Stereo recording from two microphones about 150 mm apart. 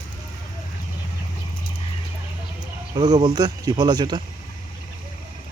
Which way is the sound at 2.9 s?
30° right (ahead or behind).